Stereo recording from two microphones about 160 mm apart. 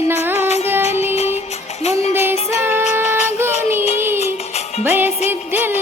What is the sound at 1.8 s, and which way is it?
Music, 45° left (ahead or behind).